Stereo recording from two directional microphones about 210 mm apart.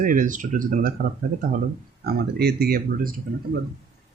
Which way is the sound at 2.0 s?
45° right (ahead or behind).